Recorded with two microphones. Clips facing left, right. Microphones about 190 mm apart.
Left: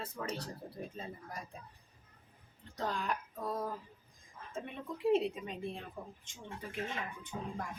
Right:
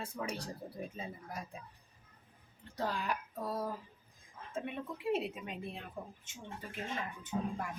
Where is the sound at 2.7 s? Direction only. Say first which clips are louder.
Even; 5° right (ahead or behind).